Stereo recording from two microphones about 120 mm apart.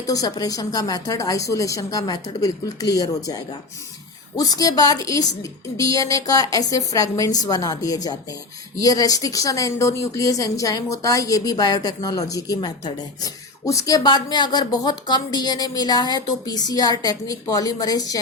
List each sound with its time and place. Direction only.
0.0 s a woman's voice: 30° left (ahead or behind)